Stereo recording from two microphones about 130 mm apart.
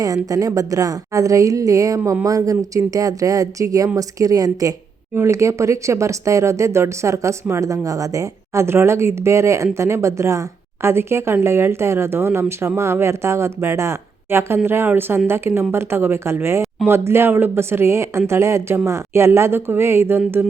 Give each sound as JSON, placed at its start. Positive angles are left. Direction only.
{"t": 0.0, "sound": "a woman's voice", "side_deg": -25}